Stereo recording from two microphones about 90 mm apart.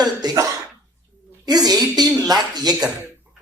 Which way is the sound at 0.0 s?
45° right (ahead or behind).